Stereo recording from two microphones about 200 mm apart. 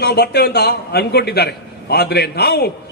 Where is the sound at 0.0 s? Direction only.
55° left (ahead or behind).